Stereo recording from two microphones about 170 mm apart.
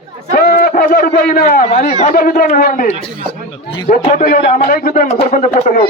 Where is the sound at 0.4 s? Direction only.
65° left (ahead or behind).